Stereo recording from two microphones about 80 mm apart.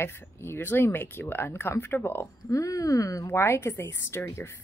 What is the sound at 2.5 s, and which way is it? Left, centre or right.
Speech, left.